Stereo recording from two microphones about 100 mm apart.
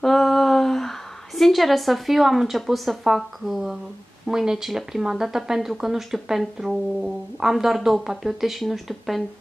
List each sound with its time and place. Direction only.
0.0 s a woman's voice: 5° left (ahead or behind)